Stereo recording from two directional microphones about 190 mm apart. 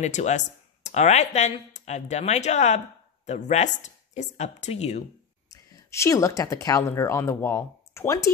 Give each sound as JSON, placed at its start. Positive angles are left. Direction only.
{"t": 0.0, "sound": "speech", "side_deg": 35}
{"t": 5.5, "sound": "speech", "side_deg": 20}